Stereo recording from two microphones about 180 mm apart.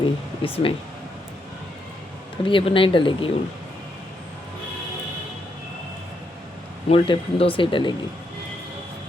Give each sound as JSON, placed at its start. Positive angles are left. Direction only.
{"t": 0.4, "sound": "speech", "side_deg": 30}
{"t": 2.4, "sound": "speech", "side_deg": 30}
{"t": 6.8, "sound": "speech", "side_deg": 30}